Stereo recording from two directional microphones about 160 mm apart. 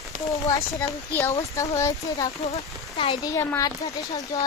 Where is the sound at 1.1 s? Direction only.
15° left (ahead or behind).